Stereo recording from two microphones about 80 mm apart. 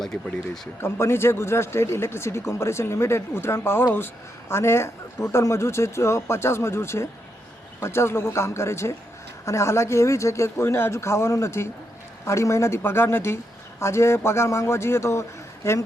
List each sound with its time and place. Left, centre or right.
0.0 s speech: centre
0.8 s speech: left